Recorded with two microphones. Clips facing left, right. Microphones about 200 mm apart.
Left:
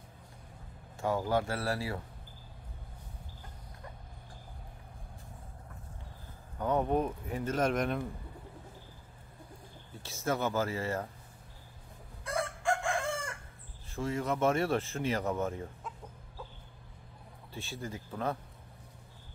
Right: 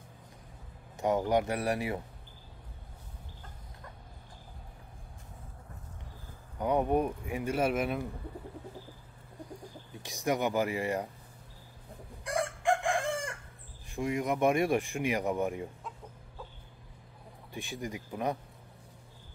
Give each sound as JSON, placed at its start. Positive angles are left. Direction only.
{"t": 0.9, "sound": "speech", "side_deg": -20}
{"t": 6.6, "sound": "speech", "side_deg": -15}
{"t": 10.0, "sound": "speech", "side_deg": -15}
{"t": 12.3, "sound": "chicken", "side_deg": -15}
{"t": 13.8, "sound": "speech", "side_deg": -15}
{"t": 17.5, "sound": "speech", "side_deg": -15}